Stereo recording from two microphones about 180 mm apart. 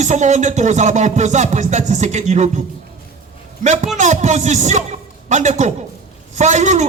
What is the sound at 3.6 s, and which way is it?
Music, 40° right (ahead or behind).